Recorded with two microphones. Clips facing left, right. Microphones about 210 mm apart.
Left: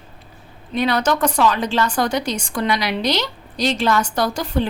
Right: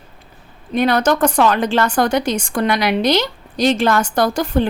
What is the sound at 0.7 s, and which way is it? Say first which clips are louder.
A woman's voice: right 4 dB; 50° right (ahead or behind).